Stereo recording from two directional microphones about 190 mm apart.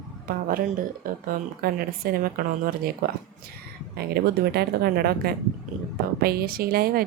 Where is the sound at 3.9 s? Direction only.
55° right (ahead or behind).